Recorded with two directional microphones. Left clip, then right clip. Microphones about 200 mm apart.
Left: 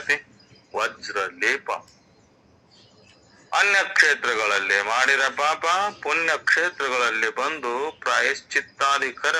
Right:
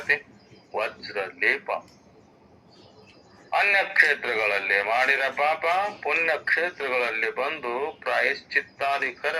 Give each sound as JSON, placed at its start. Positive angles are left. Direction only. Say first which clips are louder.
{"t": 0.7, "sound": "a man's voice", "louder": "left 3 dB", "side_deg": 25}
{"t": 3.5, "sound": "a man's voice", "louder": "left 2 dB", "side_deg": 25}